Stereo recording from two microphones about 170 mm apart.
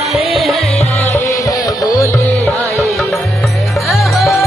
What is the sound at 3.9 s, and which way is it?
Music, centre (ahead or behind).